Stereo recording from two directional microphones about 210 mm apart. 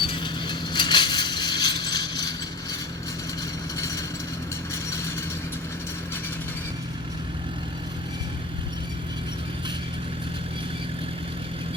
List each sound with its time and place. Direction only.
0.0 s mechanisms: 25° left (ahead or behind)
3.8 s vehicle: 15° left (ahead or behind)